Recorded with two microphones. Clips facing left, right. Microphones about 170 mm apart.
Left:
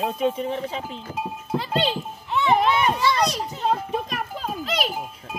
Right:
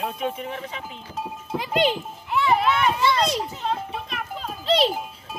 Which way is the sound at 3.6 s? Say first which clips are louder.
Left 4 dB; 45° left (ahead or behind).